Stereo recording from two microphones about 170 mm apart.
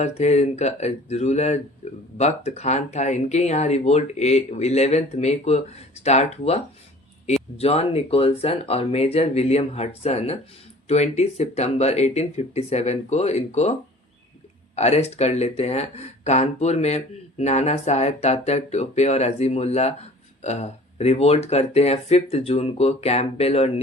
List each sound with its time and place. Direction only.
0.0 s speech: 40° left (ahead or behind)
7.6 s speech: 35° left (ahead or behind)
14.8 s speech: 40° left (ahead or behind)